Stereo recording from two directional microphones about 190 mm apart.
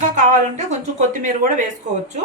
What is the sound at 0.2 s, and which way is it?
Speech, 35° right (ahead or behind).